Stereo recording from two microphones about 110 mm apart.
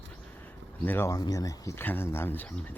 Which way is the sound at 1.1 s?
35° left (ahead or behind).